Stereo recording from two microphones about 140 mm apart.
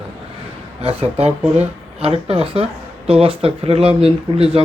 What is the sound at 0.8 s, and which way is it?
Speech, 45° right (ahead or behind).